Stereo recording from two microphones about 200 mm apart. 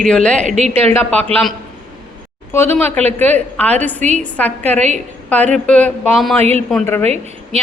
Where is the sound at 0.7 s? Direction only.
10° left (ahead or behind).